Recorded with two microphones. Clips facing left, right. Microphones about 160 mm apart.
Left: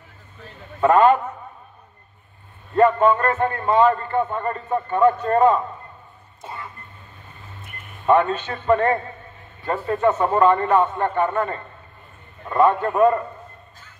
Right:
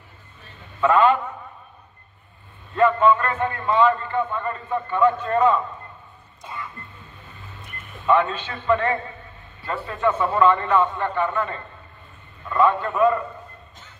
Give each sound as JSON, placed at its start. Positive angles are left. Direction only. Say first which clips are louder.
{"t": 0.7, "sound": "a man's voice", "louder": "left 3 dB", "side_deg": 45}
{"t": 2.7, "sound": "a man's voice", "louder": "left 2 dB", "side_deg": 45}
{"t": 8.1, "sound": "a man's voice", "louder": "left 2 dB", "side_deg": 45}